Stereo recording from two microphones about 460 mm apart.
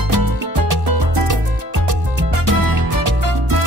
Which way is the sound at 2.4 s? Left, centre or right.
Right.